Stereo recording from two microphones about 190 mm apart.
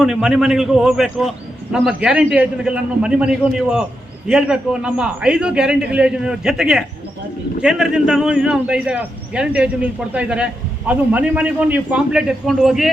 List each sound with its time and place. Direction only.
0.0 s a man's voice: 5° right (ahead or behind)